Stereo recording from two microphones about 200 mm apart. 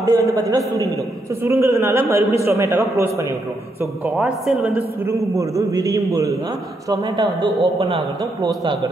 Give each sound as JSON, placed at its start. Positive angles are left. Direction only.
{"t": 0.0, "sound": "a man's voice", "side_deg": -15}